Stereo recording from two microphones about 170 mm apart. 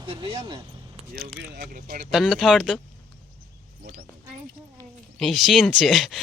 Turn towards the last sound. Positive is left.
turn(degrees=0)  # may be behind; listen again after turning